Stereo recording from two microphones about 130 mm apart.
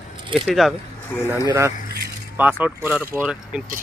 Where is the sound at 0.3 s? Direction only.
Centre (ahead or behind).